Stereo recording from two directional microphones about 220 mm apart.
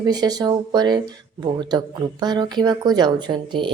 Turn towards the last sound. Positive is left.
turn(degrees=-20)  # may be behind; listen again after turning